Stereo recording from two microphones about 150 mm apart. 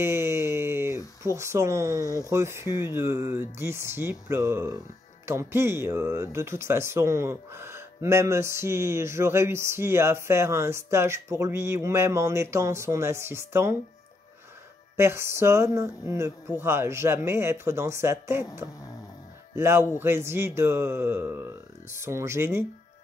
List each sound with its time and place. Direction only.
0.0 s a sound: 15° right (ahead or behind)
2.2 s speech: 20° right (ahead or behind)
15.0 s speech: 15° right (ahead or behind)
19.5 s speech: 15° right (ahead or behind)